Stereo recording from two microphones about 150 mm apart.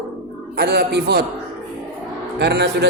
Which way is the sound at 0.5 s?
90° right.